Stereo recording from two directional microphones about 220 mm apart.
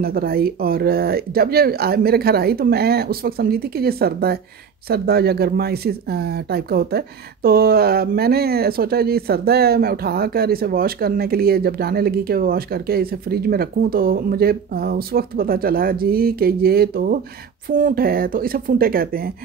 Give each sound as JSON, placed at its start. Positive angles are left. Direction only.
{"t": 0.0, "sound": "speech", "side_deg": -45}